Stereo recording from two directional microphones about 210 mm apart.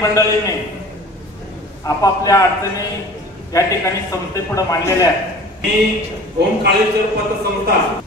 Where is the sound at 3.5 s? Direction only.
15° left (ahead or behind).